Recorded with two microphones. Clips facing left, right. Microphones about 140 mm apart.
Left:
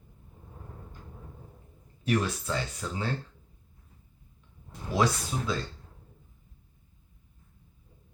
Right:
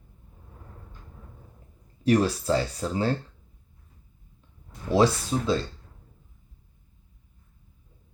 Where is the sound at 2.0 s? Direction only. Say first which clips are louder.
Right 7 dB; 35° right (ahead or behind).